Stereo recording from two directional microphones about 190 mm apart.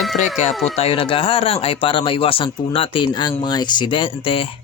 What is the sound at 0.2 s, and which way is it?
A man's voice, 35° left (ahead or behind).